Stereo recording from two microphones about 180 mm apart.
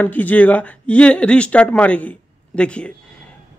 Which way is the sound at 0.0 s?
10° left (ahead or behind).